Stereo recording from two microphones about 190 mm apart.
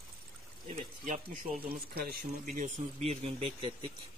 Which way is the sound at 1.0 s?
40° right (ahead or behind).